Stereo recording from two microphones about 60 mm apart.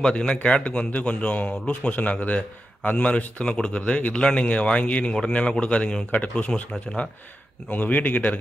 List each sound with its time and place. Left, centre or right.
0.0 s speech: centre